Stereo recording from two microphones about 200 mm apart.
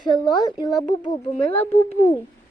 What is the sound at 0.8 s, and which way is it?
Speech, 35° left (ahead or behind).